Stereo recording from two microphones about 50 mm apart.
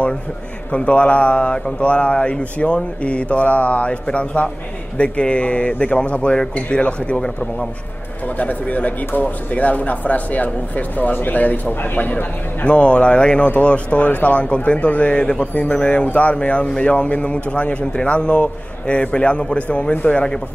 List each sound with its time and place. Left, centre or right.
0.7 s a man's voice: left
8.4 s speech: left
12.6 s a man's voice: left